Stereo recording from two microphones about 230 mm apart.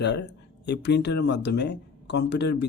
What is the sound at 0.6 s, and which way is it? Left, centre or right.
Speech, left.